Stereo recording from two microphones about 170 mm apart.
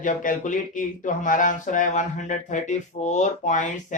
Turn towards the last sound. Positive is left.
turn(degrees=45)  # may be behind; listen again after turning